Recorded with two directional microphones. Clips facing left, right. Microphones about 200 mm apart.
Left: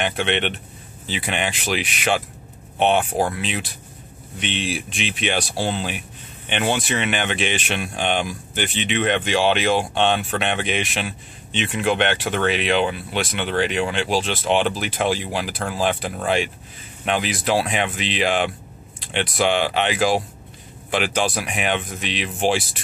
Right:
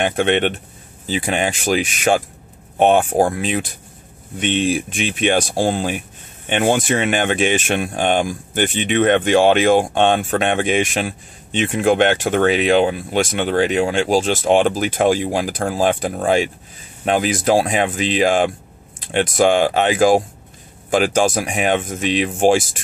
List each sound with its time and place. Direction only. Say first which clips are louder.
0.0 s speech: right 6 dB; 45° right (ahead or behind)